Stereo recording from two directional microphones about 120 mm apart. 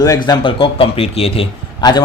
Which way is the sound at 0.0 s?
35° left (ahead or behind).